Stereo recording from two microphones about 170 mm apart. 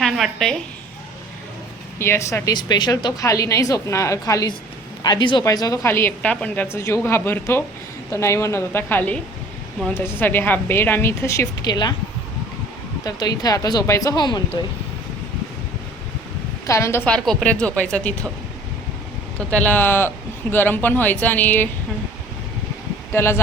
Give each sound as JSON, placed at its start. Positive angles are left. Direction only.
{"t": 0.0, "sound": "a woman's voice", "side_deg": 0}
{"t": 2.0, "sound": "a woman's voice", "side_deg": 15}
{"t": 13.1, "sound": "a woman's voice", "side_deg": 25}
{"t": 16.6, "sound": "a woman's voice", "side_deg": 15}
{"t": 17.1, "sound": "a woman's voice", "side_deg": 5}
{"t": 19.5, "sound": "a woman's voice", "side_deg": 10}
{"t": 23.1, "sound": "a woman's voice", "side_deg": 15}